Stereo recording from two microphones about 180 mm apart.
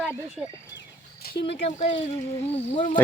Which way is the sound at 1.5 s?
35° left (ahead or behind).